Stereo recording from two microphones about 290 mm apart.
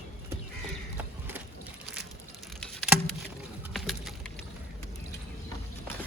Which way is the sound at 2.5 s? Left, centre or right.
Centre.